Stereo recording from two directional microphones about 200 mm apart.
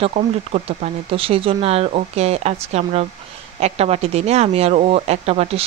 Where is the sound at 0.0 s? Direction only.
30° right (ahead or behind).